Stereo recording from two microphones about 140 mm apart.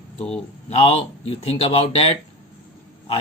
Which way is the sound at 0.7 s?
45° left (ahead or behind).